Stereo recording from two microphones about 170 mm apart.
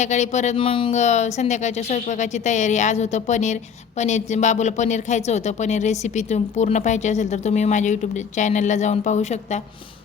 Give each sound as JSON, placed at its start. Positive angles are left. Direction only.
{"t": 0.0, "sound": "speech", "side_deg": 45}